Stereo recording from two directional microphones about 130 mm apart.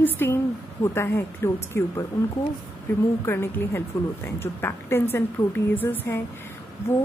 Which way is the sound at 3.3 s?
20° left (ahead or behind).